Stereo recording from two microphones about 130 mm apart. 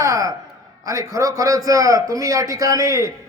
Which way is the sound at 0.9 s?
25° right (ahead or behind).